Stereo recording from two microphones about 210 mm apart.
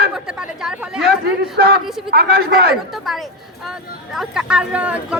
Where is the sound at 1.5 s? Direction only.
50° right (ahead or behind).